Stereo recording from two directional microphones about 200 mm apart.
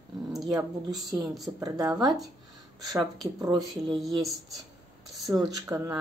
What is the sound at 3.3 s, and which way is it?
Speech, 15° right (ahead or behind).